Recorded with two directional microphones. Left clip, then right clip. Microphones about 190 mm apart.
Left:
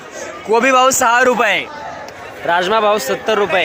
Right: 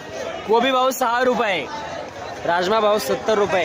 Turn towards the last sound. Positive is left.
turn(degrees=10)  # may be behind; listen again after turning